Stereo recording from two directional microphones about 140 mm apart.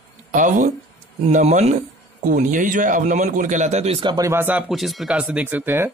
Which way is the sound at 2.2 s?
70° right (ahead or behind).